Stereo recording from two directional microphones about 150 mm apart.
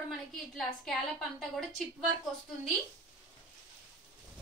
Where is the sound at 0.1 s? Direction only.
Centre (ahead or behind).